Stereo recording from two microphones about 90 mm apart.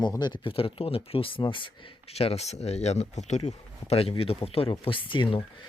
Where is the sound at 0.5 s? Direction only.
90° left; by 1.7 s 65° left (ahead or behind).